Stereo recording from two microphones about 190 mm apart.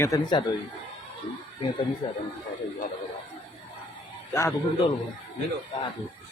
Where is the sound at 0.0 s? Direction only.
20° left (ahead or behind).